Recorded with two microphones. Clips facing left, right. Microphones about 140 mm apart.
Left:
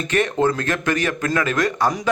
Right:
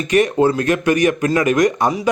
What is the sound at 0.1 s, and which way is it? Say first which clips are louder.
Speech: right 5 dB; 10° right (ahead or behind).